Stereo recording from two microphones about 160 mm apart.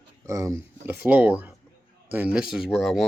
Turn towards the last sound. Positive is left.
turn(degrees=0)  # may be behind; listen again after turning